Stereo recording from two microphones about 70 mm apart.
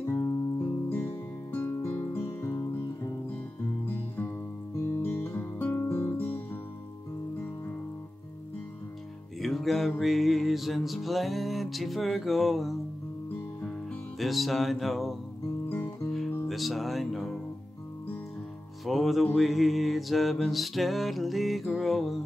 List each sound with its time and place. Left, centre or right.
0.0 s music: left
5.0 s music: left
6.1 s music: left
9.4 s music: centre
14.1 s music: centre
16.4 s speech: centre
18.9 s music: centre